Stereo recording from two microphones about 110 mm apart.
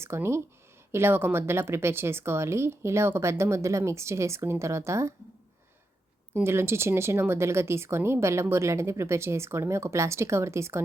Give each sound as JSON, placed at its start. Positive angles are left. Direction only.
{"t": 0.0, "sound": "speech", "side_deg": -25}
{"t": 6.3, "sound": "speech", "side_deg": -20}